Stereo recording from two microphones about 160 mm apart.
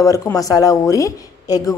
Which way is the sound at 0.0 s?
20° left (ahead or behind).